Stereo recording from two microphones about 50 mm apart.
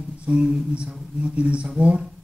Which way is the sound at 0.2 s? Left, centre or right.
Right.